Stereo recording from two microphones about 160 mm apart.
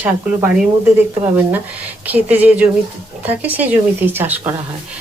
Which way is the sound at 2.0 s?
10° right (ahead or behind).